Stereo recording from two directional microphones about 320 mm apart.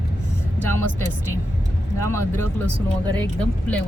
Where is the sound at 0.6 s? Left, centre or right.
Centre.